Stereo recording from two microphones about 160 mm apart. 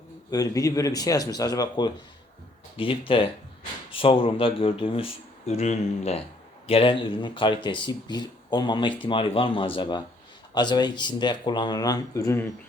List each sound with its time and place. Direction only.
0.3 s speech: 20° left (ahead or behind)